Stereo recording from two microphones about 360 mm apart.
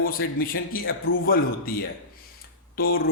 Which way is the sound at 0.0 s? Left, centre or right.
Left.